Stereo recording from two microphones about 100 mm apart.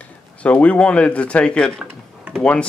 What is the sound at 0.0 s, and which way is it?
Speech, 15° left (ahead or behind).